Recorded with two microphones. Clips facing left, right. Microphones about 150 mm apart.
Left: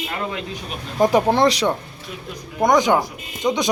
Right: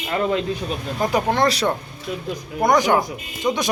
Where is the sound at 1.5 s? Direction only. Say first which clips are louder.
Left 1 dB; 15° left (ahead or behind).